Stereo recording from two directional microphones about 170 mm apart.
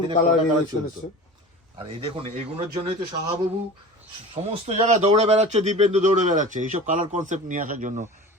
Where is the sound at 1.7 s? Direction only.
30° right (ahead or behind).